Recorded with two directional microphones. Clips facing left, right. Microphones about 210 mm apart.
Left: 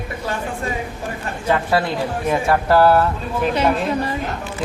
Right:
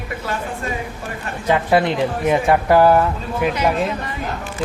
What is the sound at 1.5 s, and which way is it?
Speech, 20° right (ahead or behind).